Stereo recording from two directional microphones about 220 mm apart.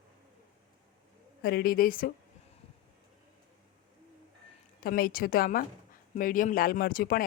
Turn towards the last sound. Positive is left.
turn(degrees=40)  # may be behind; listen again after turning